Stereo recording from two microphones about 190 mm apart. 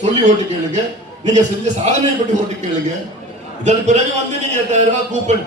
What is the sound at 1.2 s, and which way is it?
Speech, 40° right (ahead or behind).